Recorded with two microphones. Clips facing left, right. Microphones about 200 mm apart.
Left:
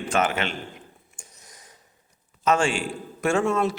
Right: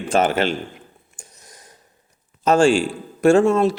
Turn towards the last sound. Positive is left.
turn(degrees=-30)  # may be behind; listen again after turning